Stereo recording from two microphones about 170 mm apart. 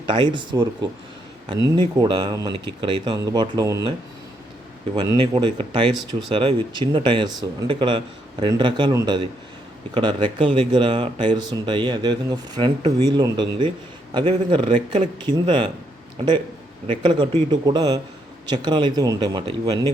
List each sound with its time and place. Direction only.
0.1 s speech: 30° right (ahead or behind)
0.5 s speech: 20° right (ahead or behind)
4.9 s speech: 30° right (ahead or behind)